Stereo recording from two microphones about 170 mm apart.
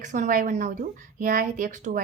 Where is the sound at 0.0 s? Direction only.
45° right (ahead or behind).